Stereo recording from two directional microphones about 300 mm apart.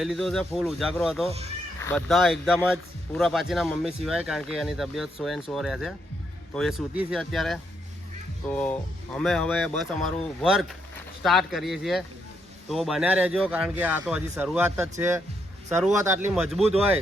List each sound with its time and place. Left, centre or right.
0.0 s speech: centre